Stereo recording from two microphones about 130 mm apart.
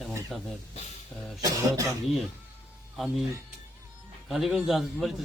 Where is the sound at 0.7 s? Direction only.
60° left (ahead or behind).